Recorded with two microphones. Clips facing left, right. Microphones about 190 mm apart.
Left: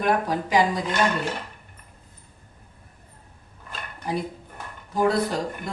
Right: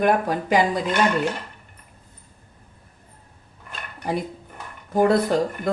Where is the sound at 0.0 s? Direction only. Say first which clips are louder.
Right 3 dB; 55° right (ahead or behind).